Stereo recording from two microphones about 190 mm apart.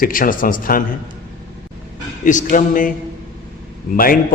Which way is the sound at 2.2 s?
45° left (ahead or behind).